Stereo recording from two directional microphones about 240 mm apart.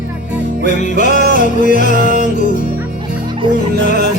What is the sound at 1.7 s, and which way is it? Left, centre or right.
Music, right.